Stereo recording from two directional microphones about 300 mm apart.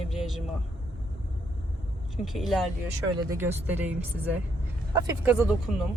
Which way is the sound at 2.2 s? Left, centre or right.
Centre.